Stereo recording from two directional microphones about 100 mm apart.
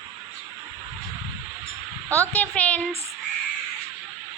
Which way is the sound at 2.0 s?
30° right (ahead or behind).